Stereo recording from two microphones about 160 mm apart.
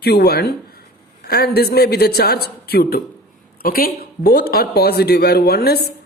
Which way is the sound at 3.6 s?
65° left (ahead or behind).